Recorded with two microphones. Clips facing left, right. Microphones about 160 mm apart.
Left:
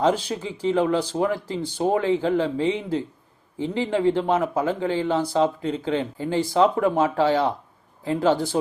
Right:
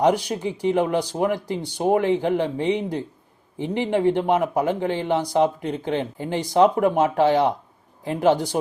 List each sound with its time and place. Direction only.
0.0 s a man's voice: 15° right (ahead or behind)